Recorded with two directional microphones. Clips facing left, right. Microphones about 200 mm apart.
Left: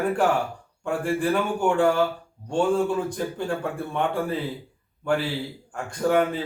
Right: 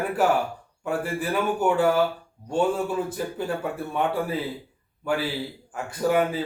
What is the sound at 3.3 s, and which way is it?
A man's voice, 5° right (ahead or behind).